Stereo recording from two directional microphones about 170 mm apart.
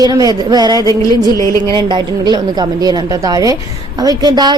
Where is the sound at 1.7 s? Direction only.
25° right (ahead or behind).